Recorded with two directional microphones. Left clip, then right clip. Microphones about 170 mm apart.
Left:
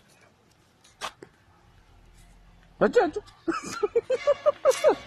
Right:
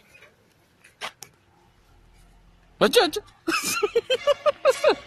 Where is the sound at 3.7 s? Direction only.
10° right (ahead or behind).